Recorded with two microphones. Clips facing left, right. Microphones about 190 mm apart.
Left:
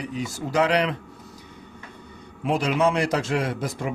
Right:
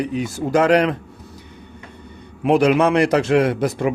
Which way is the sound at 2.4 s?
65° right (ahead or behind).